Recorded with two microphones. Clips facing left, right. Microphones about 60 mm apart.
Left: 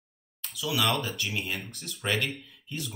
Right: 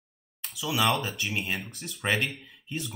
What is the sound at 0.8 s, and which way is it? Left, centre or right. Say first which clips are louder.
Speech: right 2 dB; centre.